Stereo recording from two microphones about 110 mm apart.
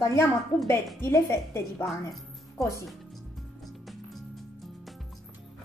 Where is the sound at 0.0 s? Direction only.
25° left (ahead or behind).